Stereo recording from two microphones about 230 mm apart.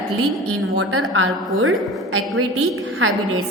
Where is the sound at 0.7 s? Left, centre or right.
Right.